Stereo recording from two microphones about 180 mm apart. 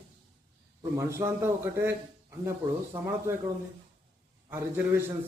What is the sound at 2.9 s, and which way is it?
Speech, 25° right (ahead or behind).